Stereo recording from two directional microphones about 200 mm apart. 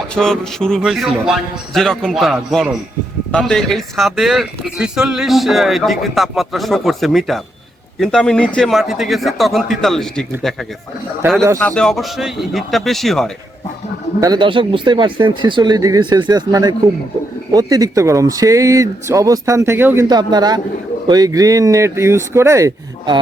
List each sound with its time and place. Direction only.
0.1 s speech: 5° left (ahead or behind)
11.6 s speech: 5° left (ahead or behind)
14.2 s speech: 20° right (ahead or behind)